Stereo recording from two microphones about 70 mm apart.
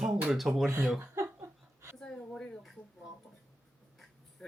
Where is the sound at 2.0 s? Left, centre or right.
Centre.